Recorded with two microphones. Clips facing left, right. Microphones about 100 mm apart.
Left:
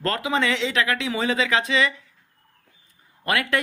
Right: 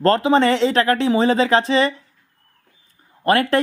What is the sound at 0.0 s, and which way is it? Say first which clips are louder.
Speech: right 9 dB; 35° right (ahead or behind).